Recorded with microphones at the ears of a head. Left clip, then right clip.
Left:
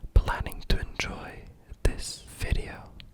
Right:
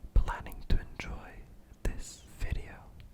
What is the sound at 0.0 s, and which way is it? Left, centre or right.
Whispering, left.